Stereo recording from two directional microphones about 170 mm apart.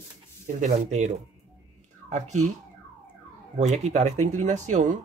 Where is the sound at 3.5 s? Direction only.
40° right (ahead or behind).